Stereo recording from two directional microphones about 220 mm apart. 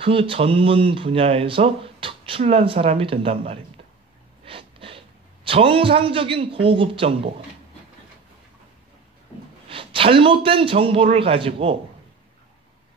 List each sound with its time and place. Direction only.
0.0 s a man's voice: 25° right (ahead or behind)
9.7 s speech: 25° right (ahead or behind)